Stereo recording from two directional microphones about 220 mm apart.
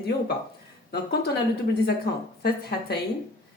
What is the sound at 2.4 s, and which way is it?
Speech, 45° left (ahead or behind).